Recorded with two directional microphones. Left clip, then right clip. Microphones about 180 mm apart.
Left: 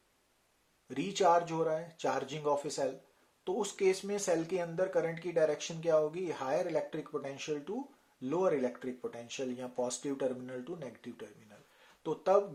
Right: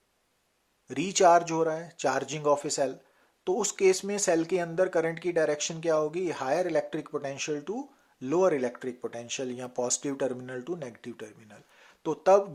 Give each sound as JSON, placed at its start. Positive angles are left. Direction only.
{"t": 0.9, "sound": "speech", "side_deg": -35}